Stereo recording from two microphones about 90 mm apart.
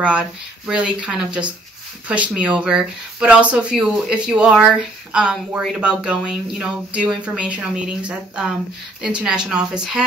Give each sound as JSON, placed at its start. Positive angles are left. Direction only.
{"t": 0.0, "sound": "speech", "side_deg": -10}